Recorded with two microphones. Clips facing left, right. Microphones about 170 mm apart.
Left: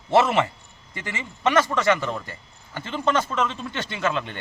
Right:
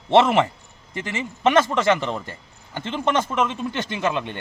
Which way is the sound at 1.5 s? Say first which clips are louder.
Right 2 dB; 25° right (ahead or behind).